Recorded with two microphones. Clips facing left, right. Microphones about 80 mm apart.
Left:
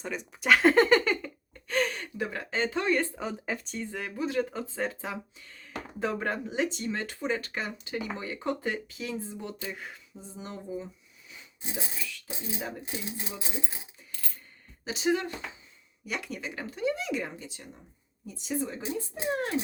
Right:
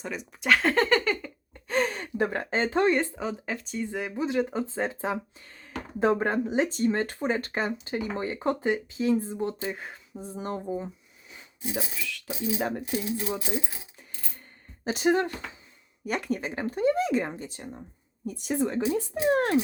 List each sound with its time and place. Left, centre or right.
0.0 s speech: centre
1.6 s a sound: right
2.2 s speech: right
3.2 s speech: centre
3.8 s speech: centre
4.9 s speech: right
10.2 s speech: right
12.0 s speech: right
12.8 s speech: left
14.8 s speech: right
18.3 s speech: right